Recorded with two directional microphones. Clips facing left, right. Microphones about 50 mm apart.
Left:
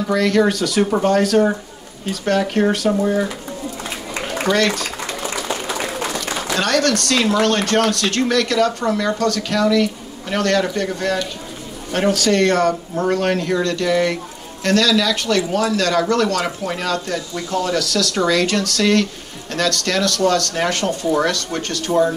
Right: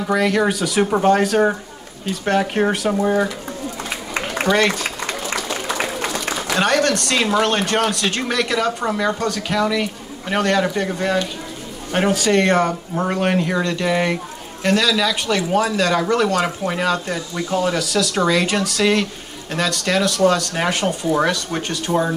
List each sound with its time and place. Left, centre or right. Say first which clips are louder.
0.1 s speech: left 1 dB; centre
4.6 s speech: even; centre
6.6 s speech: even; right